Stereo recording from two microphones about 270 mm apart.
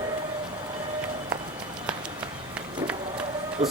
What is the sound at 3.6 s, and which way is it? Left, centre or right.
Speech, right.